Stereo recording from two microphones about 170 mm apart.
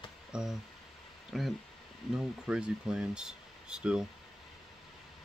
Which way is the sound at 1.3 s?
Centre (ahead or behind).